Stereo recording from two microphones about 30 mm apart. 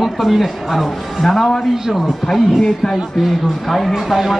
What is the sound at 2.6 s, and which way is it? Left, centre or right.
Speech, centre.